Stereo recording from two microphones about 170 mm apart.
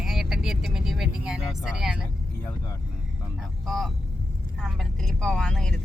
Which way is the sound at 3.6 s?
Centre (ahead or behind).